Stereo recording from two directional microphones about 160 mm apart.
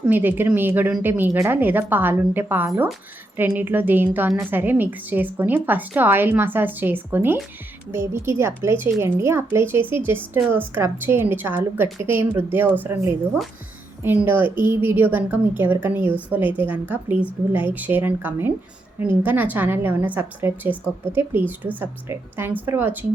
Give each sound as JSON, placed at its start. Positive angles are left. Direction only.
{"t": 0.0, "sound": "a woman's voice", "side_deg": -10}